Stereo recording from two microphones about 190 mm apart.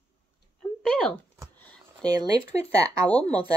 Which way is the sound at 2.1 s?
20° right (ahead or behind).